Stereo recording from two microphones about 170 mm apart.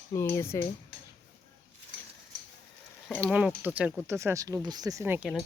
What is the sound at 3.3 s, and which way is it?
Speech, 5° right (ahead or behind).